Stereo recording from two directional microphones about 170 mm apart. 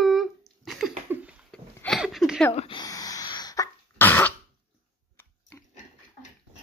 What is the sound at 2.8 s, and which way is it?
Cough, 20° left (ahead or behind).